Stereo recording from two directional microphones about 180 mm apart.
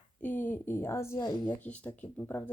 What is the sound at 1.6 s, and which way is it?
Speech, 10° left (ahead or behind).